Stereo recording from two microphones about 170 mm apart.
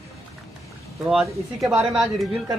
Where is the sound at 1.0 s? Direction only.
Centre (ahead or behind).